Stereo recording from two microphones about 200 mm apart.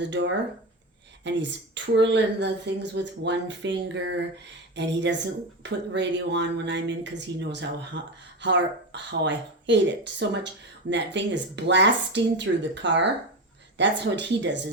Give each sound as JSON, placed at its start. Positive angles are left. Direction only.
{"t": 0.0, "sound": "speech", "side_deg": -65}